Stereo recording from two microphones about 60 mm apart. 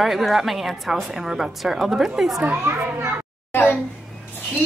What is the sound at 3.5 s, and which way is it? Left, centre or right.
Speech, left.